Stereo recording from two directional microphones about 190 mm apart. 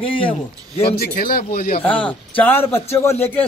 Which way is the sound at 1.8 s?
10° left (ahead or behind).